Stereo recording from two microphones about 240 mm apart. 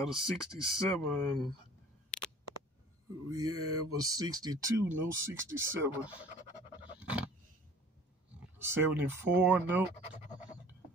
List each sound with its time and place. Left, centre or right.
0.0 s speech: centre
2.0 s a sound: centre
3.3 s mantra: right
3.9 s speech: centre
7.0 s a sound: centre
8.5 s speech: centre